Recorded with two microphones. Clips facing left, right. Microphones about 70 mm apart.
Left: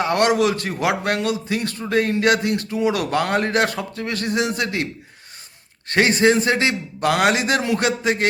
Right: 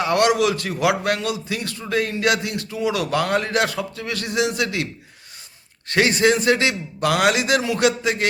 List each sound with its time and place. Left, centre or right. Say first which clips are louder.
0.0 s a man's voice: even; left
5.9 s a man's voice: left 1 dB; left